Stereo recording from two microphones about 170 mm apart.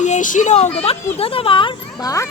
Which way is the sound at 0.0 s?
45° left (ahead or behind).